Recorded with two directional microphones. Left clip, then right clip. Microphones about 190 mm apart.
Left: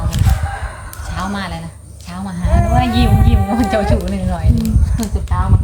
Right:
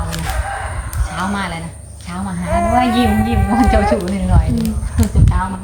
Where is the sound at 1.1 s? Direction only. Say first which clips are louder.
Right 2 dB; 55° left (ahead or behind).